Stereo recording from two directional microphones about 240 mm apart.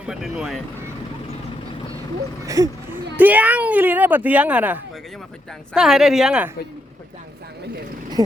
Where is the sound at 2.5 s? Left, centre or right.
Centre.